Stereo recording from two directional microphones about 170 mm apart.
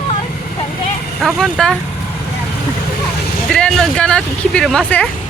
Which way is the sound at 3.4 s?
5° left (ahead or behind).